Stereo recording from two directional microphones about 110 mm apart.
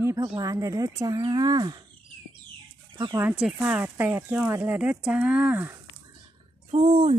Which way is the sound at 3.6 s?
20° right (ahead or behind).